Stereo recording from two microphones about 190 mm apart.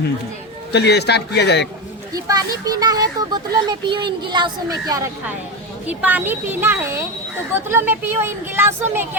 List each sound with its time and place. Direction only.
0.7 s a man's voice: 60° left (ahead or behind)
2.1 s speech: 20° right (ahead or behind)